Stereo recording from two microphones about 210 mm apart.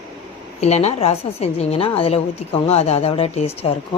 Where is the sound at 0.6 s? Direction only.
30° left (ahead or behind).